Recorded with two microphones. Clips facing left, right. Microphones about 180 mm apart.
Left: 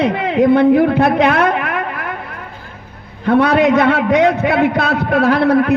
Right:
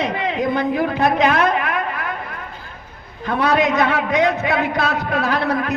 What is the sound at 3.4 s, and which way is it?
A man's voice, 60° left (ahead or behind).